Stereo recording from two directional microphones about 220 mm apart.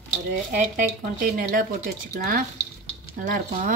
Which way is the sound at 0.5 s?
40° right (ahead or behind).